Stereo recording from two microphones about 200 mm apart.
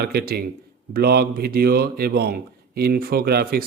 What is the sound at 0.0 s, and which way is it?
A man's voice, 50° right (ahead or behind).